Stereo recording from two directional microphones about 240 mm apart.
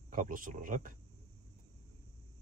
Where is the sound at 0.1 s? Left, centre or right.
Right.